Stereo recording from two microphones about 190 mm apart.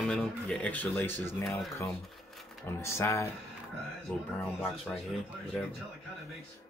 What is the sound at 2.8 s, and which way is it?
Speech, 15° left (ahead or behind).